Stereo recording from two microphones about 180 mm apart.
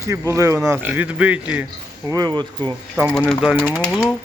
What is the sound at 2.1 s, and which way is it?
Speech, 20° right (ahead or behind).